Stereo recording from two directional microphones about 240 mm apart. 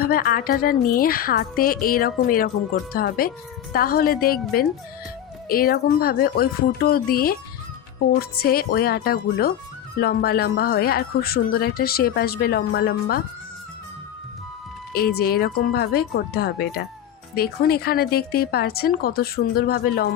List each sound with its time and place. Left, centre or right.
0.0 s speech: left
14.9 s speech: left